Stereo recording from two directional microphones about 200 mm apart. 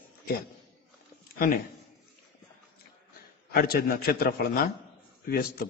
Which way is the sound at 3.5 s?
50° left (ahead or behind).